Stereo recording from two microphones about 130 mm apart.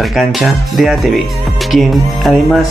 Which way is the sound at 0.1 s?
Centre (ahead or behind).